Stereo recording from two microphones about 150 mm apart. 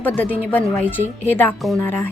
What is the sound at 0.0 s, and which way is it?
A woman's voice, 10° left (ahead or behind).